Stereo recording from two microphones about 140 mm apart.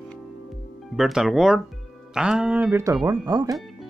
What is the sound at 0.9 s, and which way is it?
Speech, 5° right (ahead or behind).